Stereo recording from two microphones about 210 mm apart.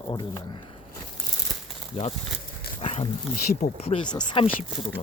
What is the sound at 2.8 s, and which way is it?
Speech, 30° left (ahead or behind).